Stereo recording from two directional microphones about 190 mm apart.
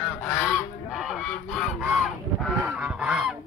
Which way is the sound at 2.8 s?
5° right (ahead or behind).